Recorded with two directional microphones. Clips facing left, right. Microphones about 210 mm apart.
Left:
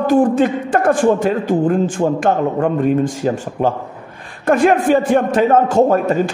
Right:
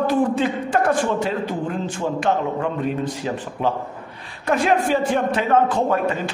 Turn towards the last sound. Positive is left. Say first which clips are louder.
# left 7 dB
turn(degrees=45)  # may be behind; listen again after turning